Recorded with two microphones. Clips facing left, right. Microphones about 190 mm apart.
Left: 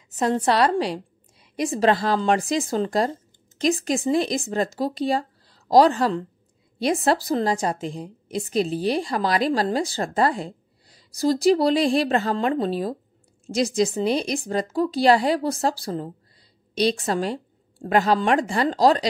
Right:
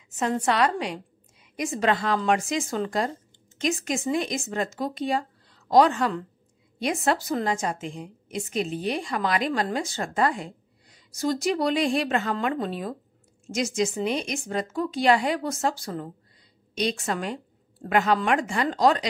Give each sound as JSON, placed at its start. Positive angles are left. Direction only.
{"t": 0.1, "sound": "a woman's voice", "side_deg": 35}